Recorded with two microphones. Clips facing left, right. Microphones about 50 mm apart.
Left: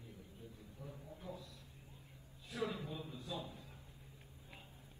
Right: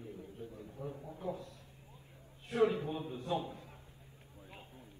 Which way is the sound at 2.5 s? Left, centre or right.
Right.